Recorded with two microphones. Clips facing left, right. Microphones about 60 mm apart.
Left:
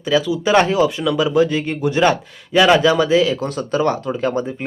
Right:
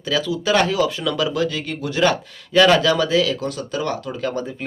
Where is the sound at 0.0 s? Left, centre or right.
Centre.